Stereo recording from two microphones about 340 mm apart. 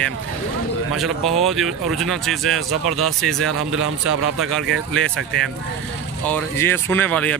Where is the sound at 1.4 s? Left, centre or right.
Centre.